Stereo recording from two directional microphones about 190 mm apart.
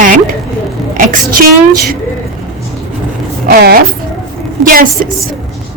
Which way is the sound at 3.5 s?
55° right (ahead or behind).